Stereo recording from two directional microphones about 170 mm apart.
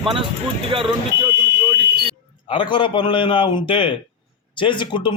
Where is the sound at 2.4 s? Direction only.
30° left (ahead or behind).